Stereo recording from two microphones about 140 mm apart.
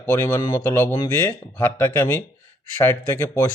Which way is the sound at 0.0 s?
15° left (ahead or behind).